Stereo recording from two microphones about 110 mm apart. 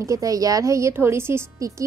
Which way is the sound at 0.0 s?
30° right (ahead or behind).